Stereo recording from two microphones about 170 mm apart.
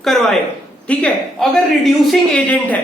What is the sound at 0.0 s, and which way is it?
Speech, centre (ahead or behind).